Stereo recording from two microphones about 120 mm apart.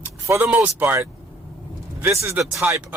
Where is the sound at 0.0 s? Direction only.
20° right (ahead or behind).